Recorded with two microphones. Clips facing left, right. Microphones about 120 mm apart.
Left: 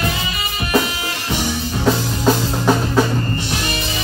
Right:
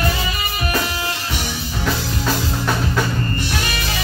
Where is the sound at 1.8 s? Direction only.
25° left (ahead or behind).